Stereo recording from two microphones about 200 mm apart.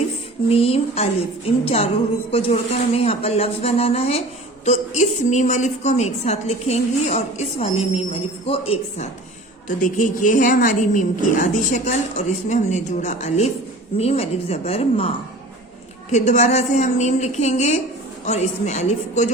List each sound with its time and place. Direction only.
0.4 s a sound: 30° left (ahead or behind)
2.3 s a woman's voice: 30° left (ahead or behind)
9.6 s a woman's voice: 40° left (ahead or behind)
16.1 s a woman's voice: 35° left (ahead or behind)